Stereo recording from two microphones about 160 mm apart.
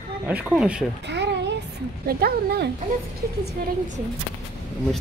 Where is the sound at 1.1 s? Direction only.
90° right.